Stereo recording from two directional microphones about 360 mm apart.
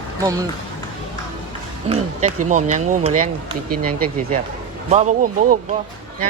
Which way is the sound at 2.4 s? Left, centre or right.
Centre.